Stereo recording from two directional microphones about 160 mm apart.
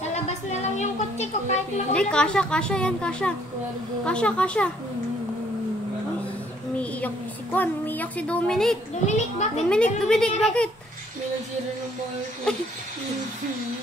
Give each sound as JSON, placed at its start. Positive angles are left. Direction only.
{"t": 0.0, "sound": "a sound", "side_deg": 45}
{"t": 2.0, "sound": "speech", "side_deg": 5}
{"t": 7.5, "sound": "speech", "side_deg": 10}
{"t": 9.0, "sound": "a child's voice", "side_deg": 45}
{"t": 9.7, "sound": "speech", "side_deg": 5}
{"t": 12.5, "sound": "speech", "side_deg": 5}